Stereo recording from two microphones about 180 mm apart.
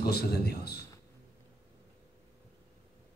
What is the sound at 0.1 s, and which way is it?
Speech, 60° left (ahead or behind).